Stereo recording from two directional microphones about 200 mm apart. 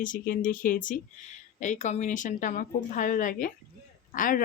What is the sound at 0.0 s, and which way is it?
Speech, 40° left (ahead or behind).